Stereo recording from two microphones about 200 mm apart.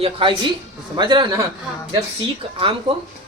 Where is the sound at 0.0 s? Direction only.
25° right (ahead or behind).